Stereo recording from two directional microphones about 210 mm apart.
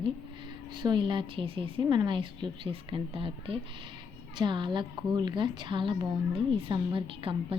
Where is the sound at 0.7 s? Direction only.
20° right (ahead or behind).